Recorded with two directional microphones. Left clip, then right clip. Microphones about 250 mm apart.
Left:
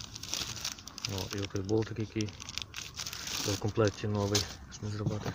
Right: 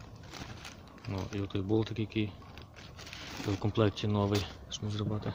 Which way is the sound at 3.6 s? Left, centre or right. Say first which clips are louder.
Right 1 dB; centre.